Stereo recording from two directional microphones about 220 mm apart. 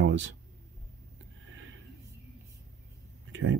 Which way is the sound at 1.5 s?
60° right (ahead or behind).